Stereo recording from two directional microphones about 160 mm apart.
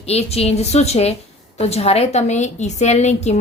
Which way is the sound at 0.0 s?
40° left (ahead or behind).